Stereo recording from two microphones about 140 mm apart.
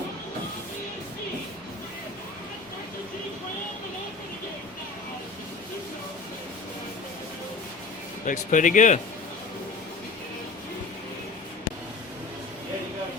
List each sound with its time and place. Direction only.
8.3 s speech: 65° left (ahead or behind)